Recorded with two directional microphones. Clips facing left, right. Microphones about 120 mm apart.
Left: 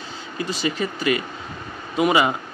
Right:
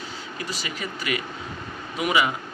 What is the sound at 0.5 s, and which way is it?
A man's voice, 25° left (ahead or behind).